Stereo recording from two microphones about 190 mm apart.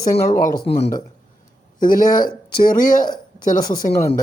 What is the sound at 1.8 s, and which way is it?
Speech, 45° left (ahead or behind).